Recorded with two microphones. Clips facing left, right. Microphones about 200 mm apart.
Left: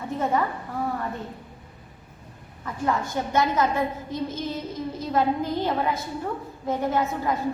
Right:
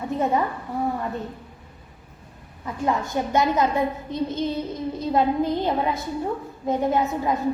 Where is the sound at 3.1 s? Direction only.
20° right (ahead or behind).